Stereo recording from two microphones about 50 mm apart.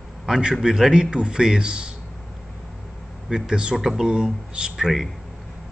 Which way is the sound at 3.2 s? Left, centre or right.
Centre.